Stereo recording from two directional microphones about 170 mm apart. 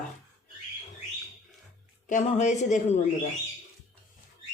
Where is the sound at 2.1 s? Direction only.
45° left (ahead or behind).